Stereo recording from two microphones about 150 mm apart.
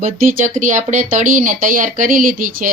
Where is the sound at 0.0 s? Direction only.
55° right (ahead or behind).